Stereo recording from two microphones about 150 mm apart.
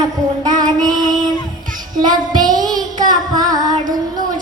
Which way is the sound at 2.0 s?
25° right (ahead or behind).